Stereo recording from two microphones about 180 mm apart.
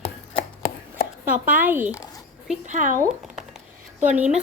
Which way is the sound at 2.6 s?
45° right (ahead or behind).